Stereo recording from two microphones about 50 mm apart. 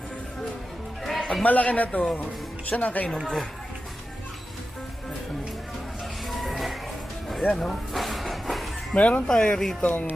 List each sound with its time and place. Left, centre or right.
1.0 s music: centre
1.5 s a man's voice: left
6.2 s music: centre
7.5 s speech: centre
7.9 s vehicle: centre
9.0 s a man's voice: left
9.2 s speech: centre
9.8 s speech: left